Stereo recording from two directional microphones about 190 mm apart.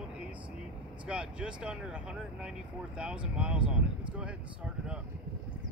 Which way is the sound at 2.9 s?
5° right (ahead or behind).